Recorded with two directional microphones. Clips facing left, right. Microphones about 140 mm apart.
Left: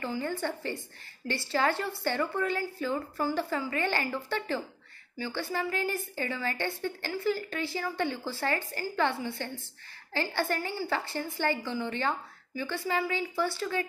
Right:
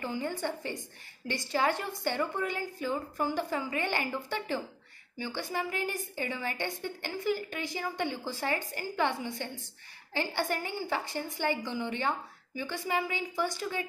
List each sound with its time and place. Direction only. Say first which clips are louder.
0.0 s a woman's voice: left 1 dB; 15° right (ahead or behind)